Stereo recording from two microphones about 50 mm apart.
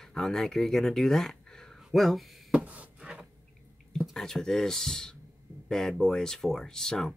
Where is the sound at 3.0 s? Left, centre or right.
Centre.